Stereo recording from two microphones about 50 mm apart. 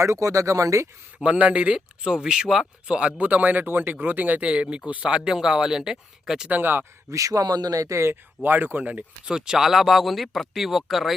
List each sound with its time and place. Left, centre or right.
0.0 s speech: right
1.2 s speech: right
4.4 s speech: right
5.1 s speech: centre
6.5 s speech: right
7.1 s speech: right
8.4 s speech: right
9.3 s speech: centre